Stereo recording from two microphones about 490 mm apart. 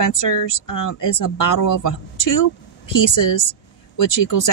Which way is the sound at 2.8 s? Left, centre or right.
Left.